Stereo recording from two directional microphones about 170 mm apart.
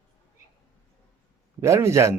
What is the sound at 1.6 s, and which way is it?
Speech, 15° right (ahead or behind).